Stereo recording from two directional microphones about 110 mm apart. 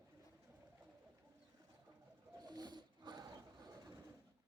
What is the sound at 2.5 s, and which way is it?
Wild animals, 40° right (ahead or behind).